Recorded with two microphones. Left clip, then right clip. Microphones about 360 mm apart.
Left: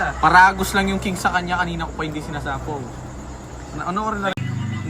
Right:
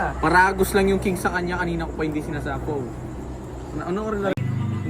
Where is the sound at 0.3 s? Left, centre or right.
Left.